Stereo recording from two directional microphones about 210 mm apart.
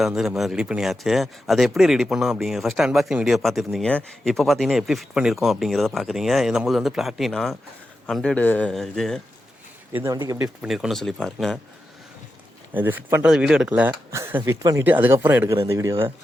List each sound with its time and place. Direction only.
0.0 s speech: centre (ahead or behind)
9.9 s speech: 15° right (ahead or behind)
10.6 s speech: centre (ahead or behind)
12.7 s speech: 10° right (ahead or behind)